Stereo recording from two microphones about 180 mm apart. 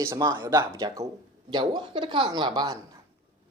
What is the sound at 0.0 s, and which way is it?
Speech, 15° right (ahead or behind).